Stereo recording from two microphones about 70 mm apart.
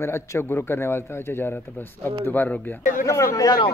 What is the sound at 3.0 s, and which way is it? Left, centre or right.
Speech, left.